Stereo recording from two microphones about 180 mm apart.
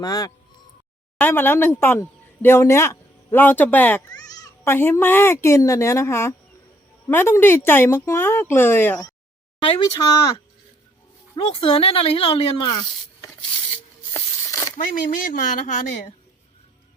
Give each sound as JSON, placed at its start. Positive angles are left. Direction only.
{"t": 0.0, "sound": "speech", "side_deg": 20}
{"t": 4.1, "sound": "speech", "side_deg": 20}
{"t": 9.6, "sound": "speech", "side_deg": 30}
{"t": 13.7, "sound": "rub", "side_deg": 15}
{"t": 14.8, "sound": "speech", "side_deg": 50}